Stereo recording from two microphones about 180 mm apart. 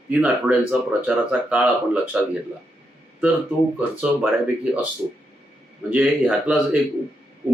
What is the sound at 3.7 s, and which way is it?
Speech, 10° right (ahead or behind).